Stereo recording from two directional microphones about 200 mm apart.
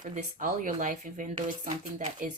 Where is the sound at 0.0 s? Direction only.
35° right (ahead or behind).